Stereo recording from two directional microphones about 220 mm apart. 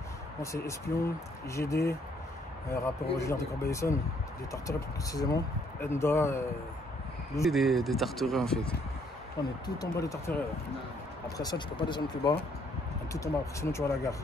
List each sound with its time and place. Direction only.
0.4 s speech: 15° left (ahead or behind)
7.4 s speech: centre (ahead or behind)
9.8 s speech: 15° left (ahead or behind)